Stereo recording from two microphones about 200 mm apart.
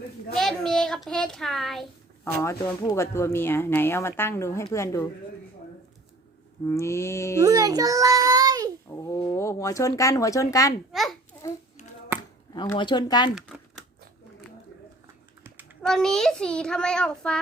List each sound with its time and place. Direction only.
0.3 s a child's voice: centre (ahead or behind)
2.4 s speech: 15° left (ahead or behind)
6.7 s speech: 15° left (ahead or behind)
7.4 s a child's voice: 20° right (ahead or behind)
8.9 s speech: 20° left (ahead or behind)
10.9 s a child's voice: centre (ahead or behind)
11.8 s finger snapping: 35° left (ahead or behind)
12.5 s speech: 20° left (ahead or behind)
13.3 s typewriter: centre (ahead or behind)
15.9 s a child's voice: centre (ahead or behind)